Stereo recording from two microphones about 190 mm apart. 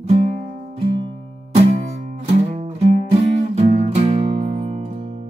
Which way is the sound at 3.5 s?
35° right (ahead or behind).